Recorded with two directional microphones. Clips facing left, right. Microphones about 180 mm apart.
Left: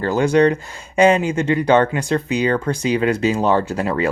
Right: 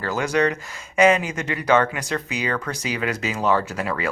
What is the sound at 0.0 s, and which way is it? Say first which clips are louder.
Speech: left 7 dB; 30° left (ahead or behind).